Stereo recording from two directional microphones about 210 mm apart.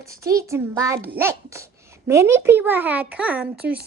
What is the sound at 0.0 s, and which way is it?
A child's voice, 15° right (ahead or behind).